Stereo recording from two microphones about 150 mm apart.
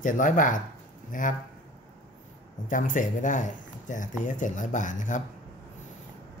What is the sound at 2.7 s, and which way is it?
Speech, 60° left (ahead or behind).